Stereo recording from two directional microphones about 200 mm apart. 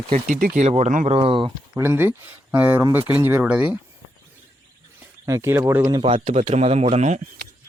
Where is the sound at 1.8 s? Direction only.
10° right (ahead or behind).